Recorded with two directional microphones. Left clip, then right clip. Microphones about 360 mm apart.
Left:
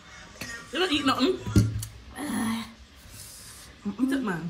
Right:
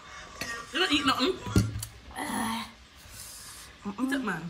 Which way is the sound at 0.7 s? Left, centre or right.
Centre.